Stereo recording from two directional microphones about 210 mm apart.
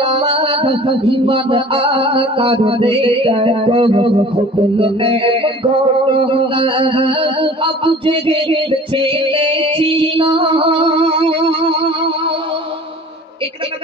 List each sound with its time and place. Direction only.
0.0 s music: 25° right (ahead or behind)